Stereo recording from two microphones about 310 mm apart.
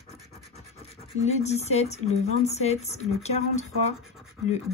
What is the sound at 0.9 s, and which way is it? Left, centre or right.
Speech, left.